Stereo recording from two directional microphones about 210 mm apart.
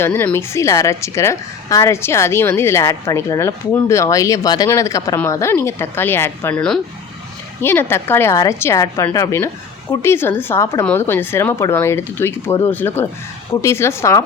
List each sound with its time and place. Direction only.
0.0 s a woman's voice: 10° left (ahead or behind)